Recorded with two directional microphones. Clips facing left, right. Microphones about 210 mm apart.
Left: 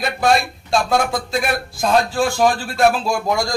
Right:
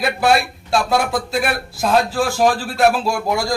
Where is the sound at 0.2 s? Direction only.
5° right (ahead or behind).